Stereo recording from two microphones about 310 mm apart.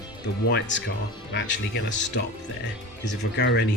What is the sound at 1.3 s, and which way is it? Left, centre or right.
Speech, left.